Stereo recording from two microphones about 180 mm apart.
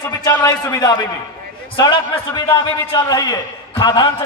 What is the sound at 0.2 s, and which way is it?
A man's voice, 15° left (ahead or behind).